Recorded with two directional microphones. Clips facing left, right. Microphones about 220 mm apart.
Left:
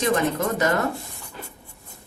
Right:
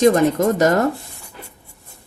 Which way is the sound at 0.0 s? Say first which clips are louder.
Right 8 dB; 40° right (ahead or behind).